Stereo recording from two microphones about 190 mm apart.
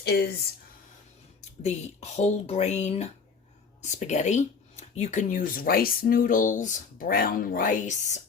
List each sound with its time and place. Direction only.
0.0 s speech: 60° left (ahead or behind)
1.4 s speech: 35° left (ahead or behind)